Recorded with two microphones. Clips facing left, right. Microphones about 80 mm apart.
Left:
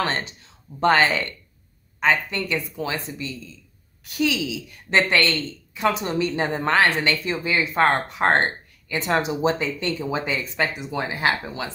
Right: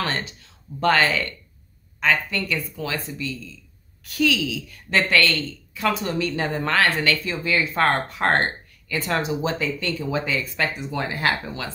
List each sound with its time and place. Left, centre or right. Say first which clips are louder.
0.0 s a woman's voice: left 2 dB; left